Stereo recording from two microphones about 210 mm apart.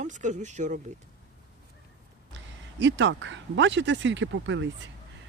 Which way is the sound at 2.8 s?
60° right (ahead or behind).